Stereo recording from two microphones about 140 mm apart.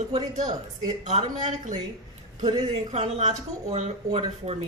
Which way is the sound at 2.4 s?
30° right (ahead or behind).